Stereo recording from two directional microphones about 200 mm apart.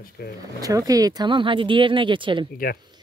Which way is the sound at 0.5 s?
15° right (ahead or behind).